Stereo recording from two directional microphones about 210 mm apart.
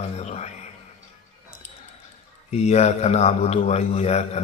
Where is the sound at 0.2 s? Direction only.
30° left (ahead or behind).